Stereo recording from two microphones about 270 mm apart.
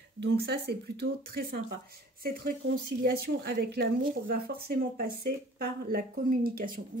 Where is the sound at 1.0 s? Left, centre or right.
Right.